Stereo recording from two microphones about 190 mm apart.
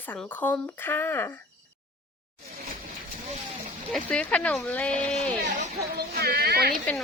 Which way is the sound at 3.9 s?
5° left (ahead or behind).